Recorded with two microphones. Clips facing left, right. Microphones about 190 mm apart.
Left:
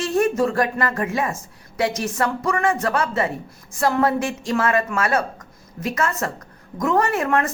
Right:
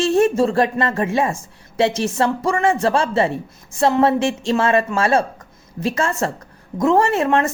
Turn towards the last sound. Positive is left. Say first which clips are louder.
# right 3 dB
turn(degrees=-25)  # may be behind; listen again after turning